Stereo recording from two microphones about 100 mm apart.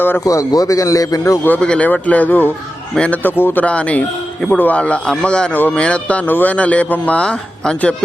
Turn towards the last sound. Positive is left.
turn(degrees=10)  # may be behind; listen again after turning